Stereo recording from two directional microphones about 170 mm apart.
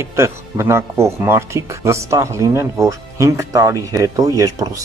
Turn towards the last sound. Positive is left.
turn(degrees=-20)  # may be behind; listen again after turning